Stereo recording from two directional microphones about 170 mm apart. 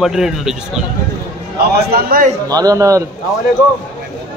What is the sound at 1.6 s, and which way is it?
Speech, 65° right (ahead or behind).